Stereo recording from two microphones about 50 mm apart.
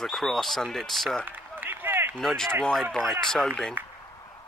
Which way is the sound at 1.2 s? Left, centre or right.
Right.